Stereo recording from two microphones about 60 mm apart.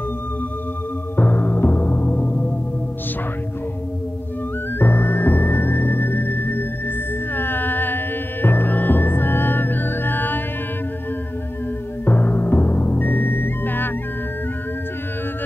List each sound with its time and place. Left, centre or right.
1.1 s music: left
4.7 s music: left
12.0 s music: left